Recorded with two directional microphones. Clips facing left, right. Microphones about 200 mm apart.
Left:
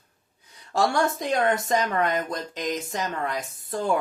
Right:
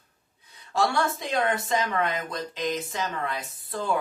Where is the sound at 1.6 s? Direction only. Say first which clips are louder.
Left 3 dB; 45° left (ahead or behind).